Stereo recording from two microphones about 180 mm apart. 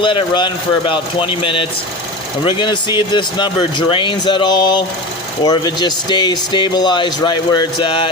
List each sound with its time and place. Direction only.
0.0 s speech: 25° left (ahead or behind)